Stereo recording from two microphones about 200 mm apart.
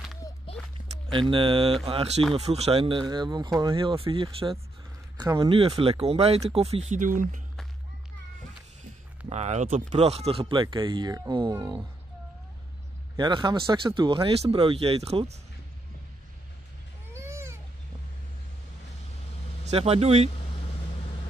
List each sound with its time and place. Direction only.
0.5 s walk: 30° left (ahead or behind)
1.3 s speech: 25° right (ahead or behind)
9.3 s speech: 35° right (ahead or behind)
13.1 s speech: 20° right (ahead or behind)
17.1 s a sound: 15° right (ahead or behind)
19.7 s speech: 30° right (ahead or behind)